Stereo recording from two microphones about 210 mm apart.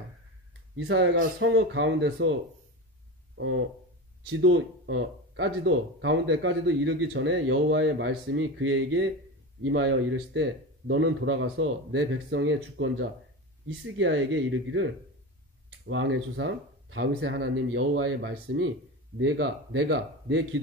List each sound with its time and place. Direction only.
0.7 s speech: 60° right (ahead or behind)
3.3 s speech: 65° right (ahead or behind)